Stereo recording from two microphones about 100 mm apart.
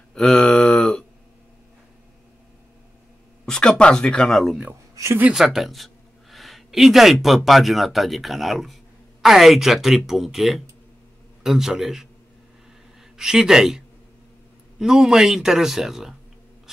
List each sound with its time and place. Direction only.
0.1 s a sound: 10° left (ahead or behind)
3.4 s speech: 5° left (ahead or behind)
4.9 s speech: 30° right (ahead or behind)
5.3 s speech: 5° right (ahead or behind)
13.2 s speech: 5° right (ahead or behind)